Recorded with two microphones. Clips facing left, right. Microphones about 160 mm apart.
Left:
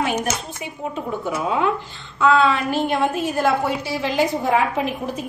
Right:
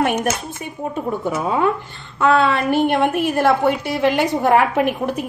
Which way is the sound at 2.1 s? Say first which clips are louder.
Right 1 dB; 60° right (ahead or behind).